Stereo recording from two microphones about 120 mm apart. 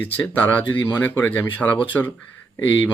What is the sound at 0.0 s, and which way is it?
Speech, 15° left (ahead or behind).